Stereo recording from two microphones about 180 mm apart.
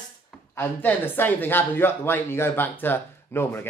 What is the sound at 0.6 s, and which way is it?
Speech, 10° left (ahead or behind).